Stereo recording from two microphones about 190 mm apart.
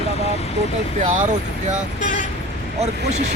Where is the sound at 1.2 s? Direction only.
40° right (ahead or behind).